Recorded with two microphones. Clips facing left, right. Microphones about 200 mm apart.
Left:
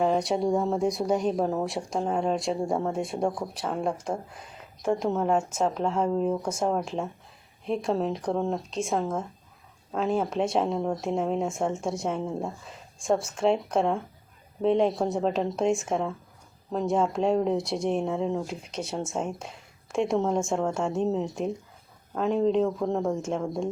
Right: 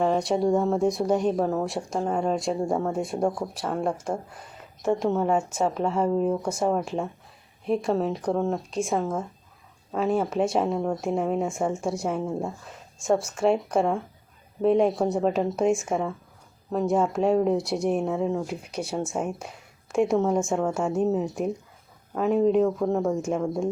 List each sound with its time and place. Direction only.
0.0 s speech: centre (ahead or behind)